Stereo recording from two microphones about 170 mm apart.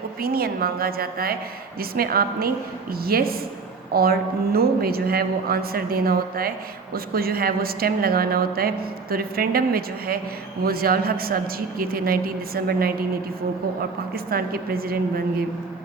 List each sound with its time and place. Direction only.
0.2 s a woman's voice: 60° right (ahead or behind)
14.1 s a woman's voice: 60° right (ahead or behind)